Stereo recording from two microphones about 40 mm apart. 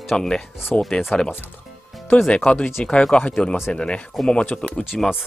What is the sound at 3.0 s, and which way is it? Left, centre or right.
Speech, centre.